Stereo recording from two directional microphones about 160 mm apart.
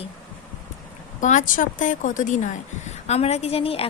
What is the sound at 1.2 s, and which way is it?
A woman's voice, 50° left (ahead or behind).